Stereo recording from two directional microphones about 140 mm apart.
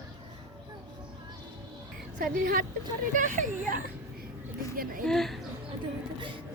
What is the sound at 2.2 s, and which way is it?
Speech, 80° right.